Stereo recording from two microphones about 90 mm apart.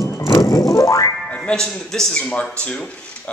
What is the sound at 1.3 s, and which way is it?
A man's voice, 10° left (ahead or behind).